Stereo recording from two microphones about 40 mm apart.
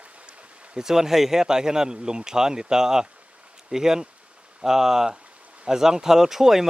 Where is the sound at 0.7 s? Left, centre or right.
Centre.